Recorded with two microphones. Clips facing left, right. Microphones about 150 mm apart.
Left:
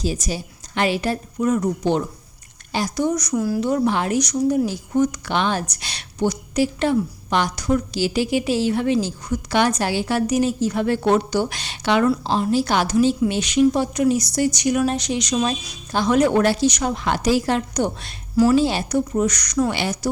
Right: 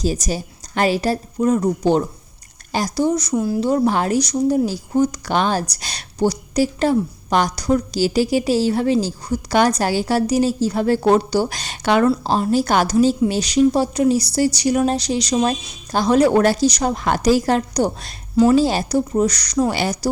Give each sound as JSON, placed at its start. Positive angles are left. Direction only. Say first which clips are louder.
{"t": 0.0, "sound": "speech", "louder": "right 3 dB", "side_deg": -40}